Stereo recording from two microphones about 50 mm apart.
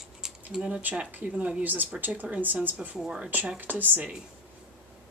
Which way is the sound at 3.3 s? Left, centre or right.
Right.